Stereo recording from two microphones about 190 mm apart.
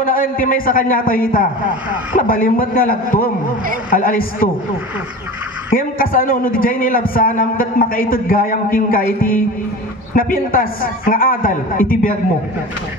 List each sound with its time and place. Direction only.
0.0 s a man's voice: 45° left (ahead or behind)
5.8 s a man's voice: 50° left (ahead or behind)